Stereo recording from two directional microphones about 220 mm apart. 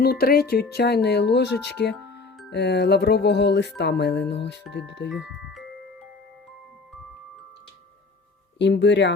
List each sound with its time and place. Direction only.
0.0 s speech: 45° left (ahead or behind)
8.5 s speech: 50° left (ahead or behind)